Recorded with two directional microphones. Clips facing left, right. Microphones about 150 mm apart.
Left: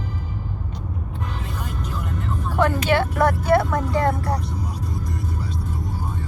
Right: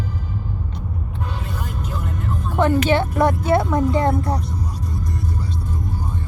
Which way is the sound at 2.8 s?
20° right (ahead or behind).